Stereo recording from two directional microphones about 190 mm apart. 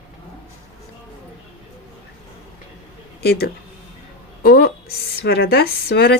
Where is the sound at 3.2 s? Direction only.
55° left (ahead or behind).